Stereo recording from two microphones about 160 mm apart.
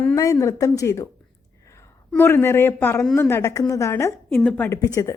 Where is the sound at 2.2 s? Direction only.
15° left (ahead or behind).